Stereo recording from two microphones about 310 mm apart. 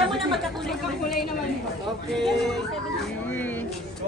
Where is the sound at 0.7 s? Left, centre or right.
Centre.